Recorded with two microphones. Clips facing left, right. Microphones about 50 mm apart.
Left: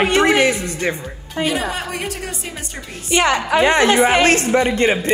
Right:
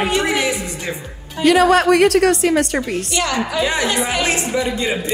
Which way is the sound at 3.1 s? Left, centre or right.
Left.